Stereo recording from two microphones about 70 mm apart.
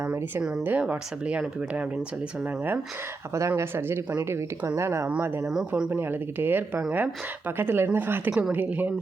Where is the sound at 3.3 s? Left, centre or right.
Right.